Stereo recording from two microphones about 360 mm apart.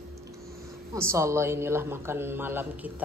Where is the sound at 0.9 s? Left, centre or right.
Centre.